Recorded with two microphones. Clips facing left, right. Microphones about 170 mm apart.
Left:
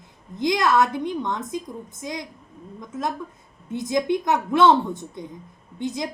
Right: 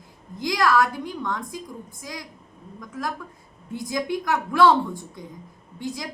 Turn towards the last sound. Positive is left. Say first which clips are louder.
# left 4 dB
turn(degrees=20)  # may be behind; listen again after turning